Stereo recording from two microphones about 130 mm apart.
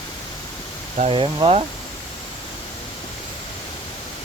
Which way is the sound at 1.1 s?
45° right (ahead or behind).